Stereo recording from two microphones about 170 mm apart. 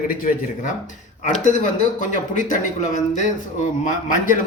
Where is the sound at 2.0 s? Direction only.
50° left (ahead or behind).